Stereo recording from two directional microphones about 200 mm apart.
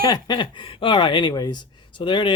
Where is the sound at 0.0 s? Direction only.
20° left (ahead or behind).